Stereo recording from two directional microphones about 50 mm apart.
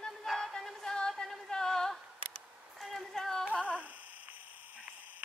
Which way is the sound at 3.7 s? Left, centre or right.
Right.